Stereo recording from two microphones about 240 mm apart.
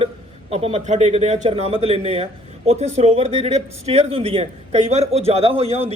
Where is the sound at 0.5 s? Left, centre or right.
Right.